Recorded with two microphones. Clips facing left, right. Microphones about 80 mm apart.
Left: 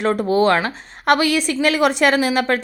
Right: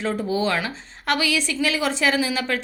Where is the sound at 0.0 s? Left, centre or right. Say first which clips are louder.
Left 7 dB; left.